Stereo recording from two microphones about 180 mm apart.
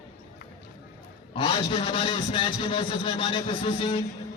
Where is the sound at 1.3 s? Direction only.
25° left (ahead or behind).